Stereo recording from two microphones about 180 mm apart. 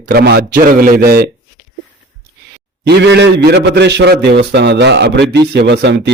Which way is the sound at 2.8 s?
70° right (ahead or behind).